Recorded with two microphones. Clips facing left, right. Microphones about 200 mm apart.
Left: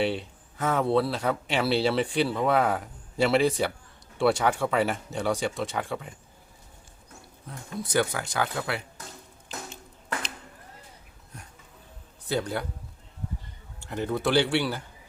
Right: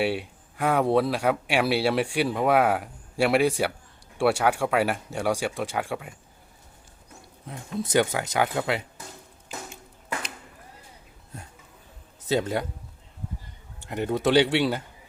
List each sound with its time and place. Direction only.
0.0 s speech: 10° right (ahead or behind)
7.4 s speech: 20° right (ahead or behind)
12.3 s speech: 20° right (ahead or behind)
13.7 s speech: 15° right (ahead or behind)